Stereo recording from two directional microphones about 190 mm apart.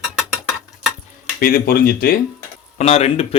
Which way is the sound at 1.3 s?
50° left (ahead or behind).